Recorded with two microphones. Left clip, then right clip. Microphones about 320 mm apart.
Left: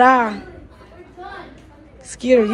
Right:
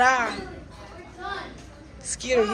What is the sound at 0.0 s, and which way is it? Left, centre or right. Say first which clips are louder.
Speech: left 7 dB; centre.